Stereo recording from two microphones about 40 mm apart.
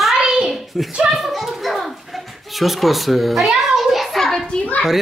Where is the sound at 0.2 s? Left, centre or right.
Centre.